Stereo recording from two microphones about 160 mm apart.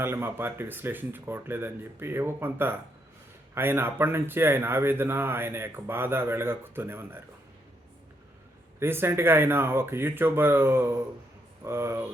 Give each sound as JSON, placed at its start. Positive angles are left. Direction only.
{"t": 0.0, "sound": "speech", "side_deg": -15}
{"t": 8.8, "sound": "speech", "side_deg": -15}